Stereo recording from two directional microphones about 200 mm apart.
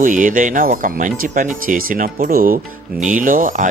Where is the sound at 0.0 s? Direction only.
40° right (ahead or behind).